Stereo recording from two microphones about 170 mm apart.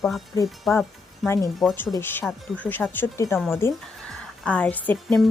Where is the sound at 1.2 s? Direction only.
15° left (ahead or behind).